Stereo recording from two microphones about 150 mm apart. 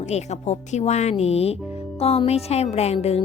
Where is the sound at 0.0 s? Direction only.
50° left (ahead or behind).